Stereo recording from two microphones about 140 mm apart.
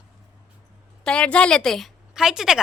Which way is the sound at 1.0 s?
5° left (ahead or behind).